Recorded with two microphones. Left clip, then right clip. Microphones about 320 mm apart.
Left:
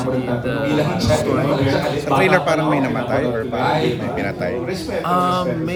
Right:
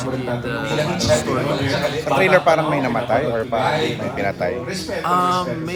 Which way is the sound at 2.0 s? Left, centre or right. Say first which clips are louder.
Right 2 dB; centre.